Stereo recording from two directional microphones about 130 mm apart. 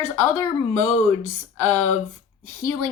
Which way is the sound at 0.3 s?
20° left (ahead or behind).